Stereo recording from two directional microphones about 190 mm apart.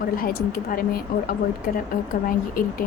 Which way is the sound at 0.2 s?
50° left (ahead or behind).